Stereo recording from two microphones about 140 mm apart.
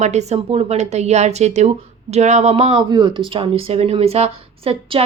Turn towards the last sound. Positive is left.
turn(degrees=-45)  # may be behind; listen again after turning